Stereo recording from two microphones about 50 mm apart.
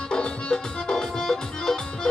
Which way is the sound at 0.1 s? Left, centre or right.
Centre.